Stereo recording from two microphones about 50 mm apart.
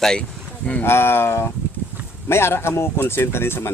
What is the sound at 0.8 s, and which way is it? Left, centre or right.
Speech, left.